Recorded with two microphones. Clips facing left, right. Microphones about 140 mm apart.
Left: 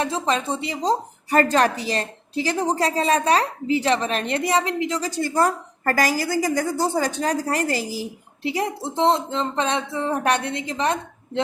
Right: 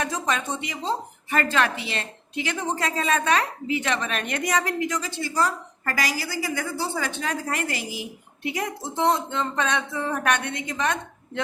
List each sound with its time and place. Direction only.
0.0 s a woman's voice: 30° left (ahead or behind)